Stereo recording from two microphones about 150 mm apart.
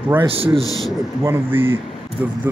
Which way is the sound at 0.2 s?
35° right (ahead or behind).